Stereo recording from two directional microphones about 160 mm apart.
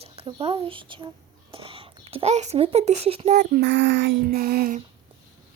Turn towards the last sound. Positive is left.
turn(degrees=-65)  # may be behind; listen again after turning